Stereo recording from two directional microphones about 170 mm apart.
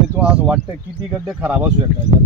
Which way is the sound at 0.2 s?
5° right (ahead or behind).